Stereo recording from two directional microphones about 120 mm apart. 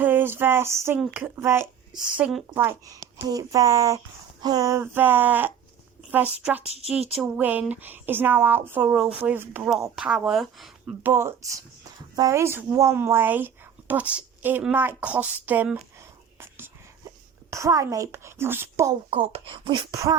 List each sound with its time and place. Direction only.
0.0 s a sound: 15° right (ahead or behind)
1.1 s speech: 20° right (ahead or behind)
1.9 s speech: 5° right (ahead or behind)
11.0 s speech: 20° right (ahead or behind)
16.4 s whispering: 20° right (ahead or behind)
17.5 s speech: 25° right (ahead or behind)
19.1 s speech: 50° right (ahead or behind)